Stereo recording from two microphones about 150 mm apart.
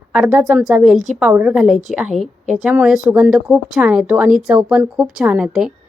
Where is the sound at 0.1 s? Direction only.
10° right (ahead or behind).